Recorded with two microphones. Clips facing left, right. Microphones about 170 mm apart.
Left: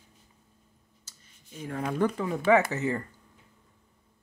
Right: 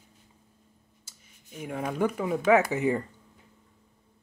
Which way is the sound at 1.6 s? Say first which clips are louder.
Even; 10° right (ahead or behind).